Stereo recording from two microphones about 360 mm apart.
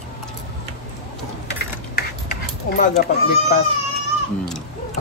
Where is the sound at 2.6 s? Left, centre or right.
Left.